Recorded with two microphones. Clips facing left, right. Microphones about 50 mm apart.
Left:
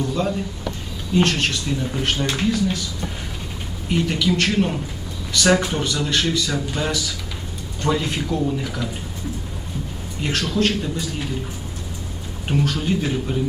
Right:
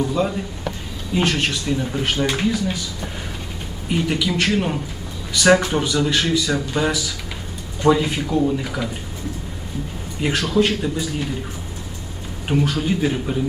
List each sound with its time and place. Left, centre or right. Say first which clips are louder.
0.1 s speech: right 1 dB; centre
3.8 s a man's voice: left 1 dB; centre
10.2 s speech: right 3 dB; centre
12.5 s speech: right 1 dB; centre